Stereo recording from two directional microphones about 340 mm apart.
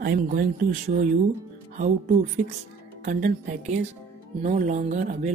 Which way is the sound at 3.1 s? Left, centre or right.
Right.